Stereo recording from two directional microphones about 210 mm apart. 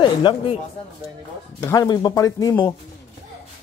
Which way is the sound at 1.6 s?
15° left (ahead or behind).